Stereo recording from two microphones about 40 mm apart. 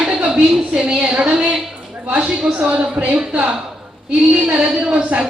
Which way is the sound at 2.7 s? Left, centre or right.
Right.